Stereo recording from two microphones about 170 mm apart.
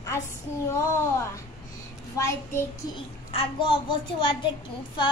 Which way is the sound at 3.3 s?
30° left (ahead or behind).